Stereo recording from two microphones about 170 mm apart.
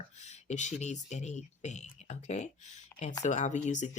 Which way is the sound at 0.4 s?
40° left (ahead or behind).